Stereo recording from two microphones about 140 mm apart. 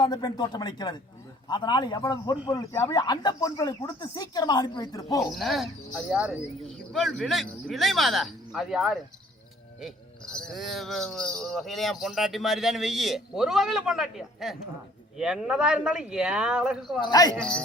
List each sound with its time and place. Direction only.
0.0 s speech: 30° left (ahead or behind)
5.2 s speech: centre (ahead or behind)
17.0 s speech: 30° left (ahead or behind)
17.3 s speech: 5° left (ahead or behind)